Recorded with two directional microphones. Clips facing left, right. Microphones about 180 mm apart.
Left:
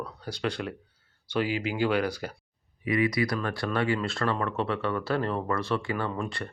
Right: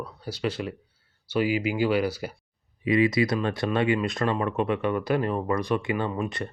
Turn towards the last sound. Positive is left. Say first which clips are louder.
# right 3 dB
turn(degrees=-20)  # may be behind; listen again after turning